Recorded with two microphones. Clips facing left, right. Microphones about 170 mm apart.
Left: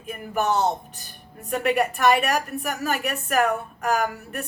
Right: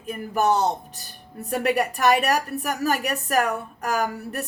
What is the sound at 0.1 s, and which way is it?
A woman's voice, 35° right (ahead or behind).